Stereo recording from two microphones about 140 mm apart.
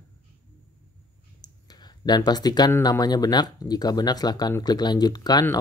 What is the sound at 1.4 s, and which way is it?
Clicking, 30° left (ahead or behind).